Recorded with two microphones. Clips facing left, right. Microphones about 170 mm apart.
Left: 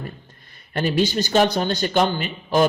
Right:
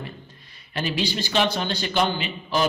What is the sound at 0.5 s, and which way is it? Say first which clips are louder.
A man's voice: left 6 dB; 50° left (ahead or behind).